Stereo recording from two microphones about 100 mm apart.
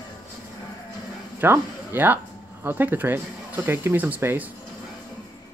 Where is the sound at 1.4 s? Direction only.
20° right (ahead or behind).